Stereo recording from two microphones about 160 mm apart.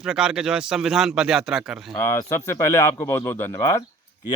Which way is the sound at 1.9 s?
15° left (ahead or behind).